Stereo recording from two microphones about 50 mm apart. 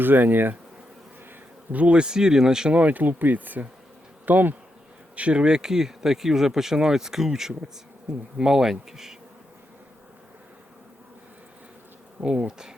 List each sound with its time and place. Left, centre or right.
0.0 s speech: right
1.7 s speech: right
2.7 s speech: right
5.1 s speech: right
12.5 s speech: centre